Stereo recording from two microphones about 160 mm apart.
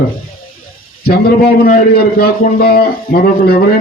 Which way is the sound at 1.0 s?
75° left (ahead or behind).